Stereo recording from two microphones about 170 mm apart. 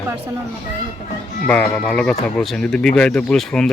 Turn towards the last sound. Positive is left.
turn(degrees=5)  # may be behind; listen again after turning